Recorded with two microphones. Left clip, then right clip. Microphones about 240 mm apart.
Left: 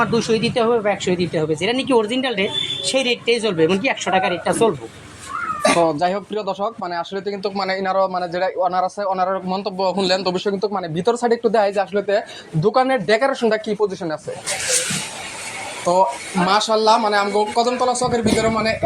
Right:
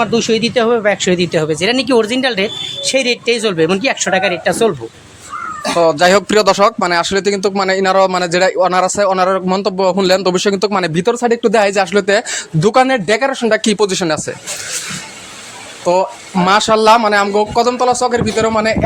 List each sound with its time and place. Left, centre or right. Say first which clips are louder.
0.0 s speech: right 4 dB; right
5.8 s speech: right 8 dB; right
13.7 s speech: right 7 dB; right
15.9 s speech: right 3 dB; right